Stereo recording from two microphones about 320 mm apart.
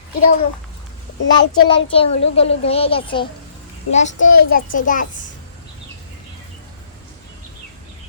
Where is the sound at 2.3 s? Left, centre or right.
Centre.